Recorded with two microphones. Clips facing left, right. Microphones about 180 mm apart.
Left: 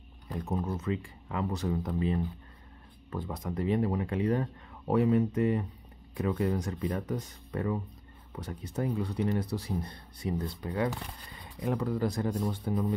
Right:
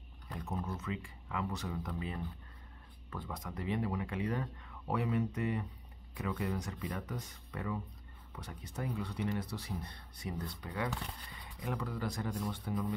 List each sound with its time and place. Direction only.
0.5 s speech: 40° left (ahead or behind)